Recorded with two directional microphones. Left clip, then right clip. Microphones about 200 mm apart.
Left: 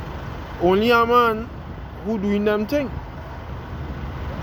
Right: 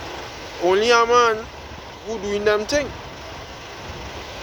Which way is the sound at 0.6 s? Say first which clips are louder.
Right 1 dB; 25° left (ahead or behind).